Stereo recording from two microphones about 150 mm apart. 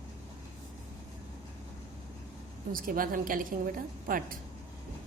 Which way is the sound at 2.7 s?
70° right (ahead or behind).